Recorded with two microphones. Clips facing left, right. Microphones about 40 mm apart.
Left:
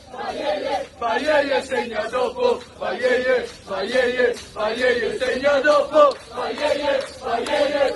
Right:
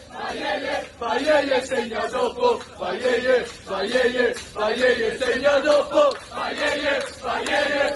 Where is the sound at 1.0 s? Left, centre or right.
Left.